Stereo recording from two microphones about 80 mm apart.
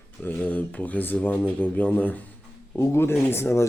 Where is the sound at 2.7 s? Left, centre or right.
Left.